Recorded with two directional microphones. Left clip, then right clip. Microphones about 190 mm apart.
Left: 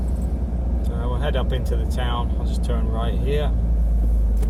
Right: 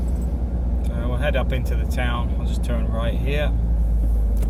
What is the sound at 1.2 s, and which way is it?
Speech, 15° right (ahead or behind).